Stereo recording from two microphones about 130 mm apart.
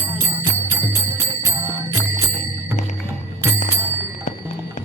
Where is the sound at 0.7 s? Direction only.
20° right (ahead or behind).